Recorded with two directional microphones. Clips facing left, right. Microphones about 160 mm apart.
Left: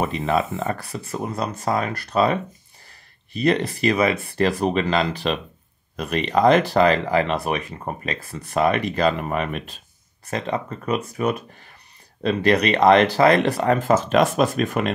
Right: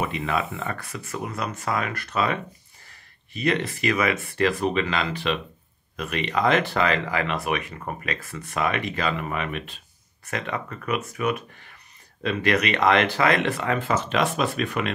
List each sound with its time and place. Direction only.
0.0 s speech: 35° left (ahead or behind)
3.3 s speech: 35° left (ahead or behind)